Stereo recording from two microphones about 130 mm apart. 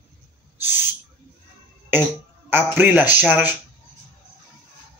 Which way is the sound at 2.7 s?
10° right (ahead or behind).